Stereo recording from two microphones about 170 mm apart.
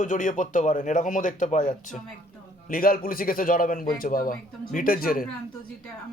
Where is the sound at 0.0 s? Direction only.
50° left (ahead or behind).